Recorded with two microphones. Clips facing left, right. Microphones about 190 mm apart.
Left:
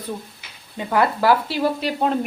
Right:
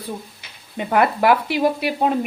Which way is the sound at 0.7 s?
20° right (ahead or behind).